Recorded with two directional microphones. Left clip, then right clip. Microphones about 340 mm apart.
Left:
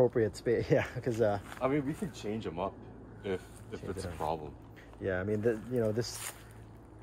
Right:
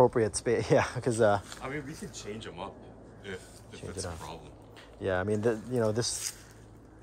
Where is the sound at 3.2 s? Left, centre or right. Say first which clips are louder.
Left 5 dB; centre.